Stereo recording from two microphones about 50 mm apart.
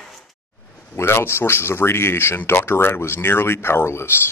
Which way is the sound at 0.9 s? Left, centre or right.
Left.